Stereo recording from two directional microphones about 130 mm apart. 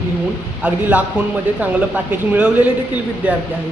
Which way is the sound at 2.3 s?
10° right (ahead or behind).